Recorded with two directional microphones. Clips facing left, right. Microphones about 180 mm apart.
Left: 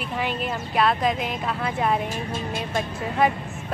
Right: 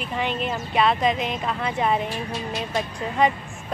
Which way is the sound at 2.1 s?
50° left (ahead or behind).